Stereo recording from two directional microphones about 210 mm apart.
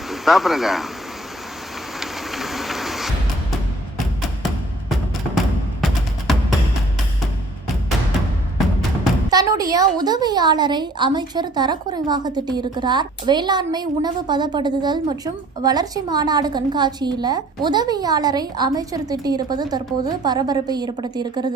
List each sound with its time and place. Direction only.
0.1 s speech: centre (ahead or behind)
2.0 s train: centre (ahead or behind)
6.3 s music: centre (ahead or behind)
9.3 s a woman's voice: 15° right (ahead or behind)